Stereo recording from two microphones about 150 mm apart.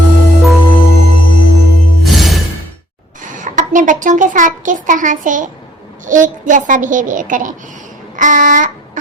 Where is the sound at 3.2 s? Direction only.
60° right (ahead or behind).